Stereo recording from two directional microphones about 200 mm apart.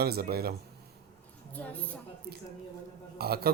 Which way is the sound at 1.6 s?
10° left (ahead or behind).